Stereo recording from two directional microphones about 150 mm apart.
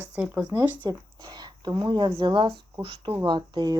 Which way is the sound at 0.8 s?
30° right (ahead or behind).